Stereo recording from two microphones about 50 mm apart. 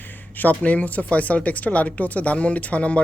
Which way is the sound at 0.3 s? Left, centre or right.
Left.